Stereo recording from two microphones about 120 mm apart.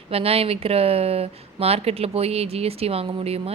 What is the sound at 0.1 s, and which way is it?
Speech, 55° right (ahead or behind).